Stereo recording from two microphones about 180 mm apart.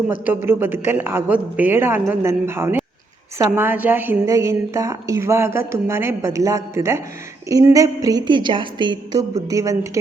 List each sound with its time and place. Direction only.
0.4 s a woman's voice: 10° right (ahead or behind)